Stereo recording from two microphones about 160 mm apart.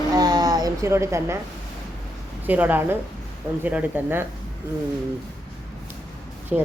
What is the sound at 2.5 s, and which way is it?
Speech, 10° right (ahead or behind).